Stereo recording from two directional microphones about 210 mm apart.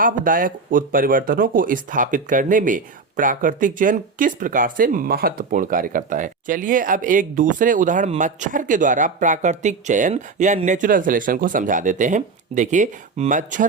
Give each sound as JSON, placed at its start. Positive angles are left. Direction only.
{"t": 0.0, "sound": "speech", "side_deg": -40}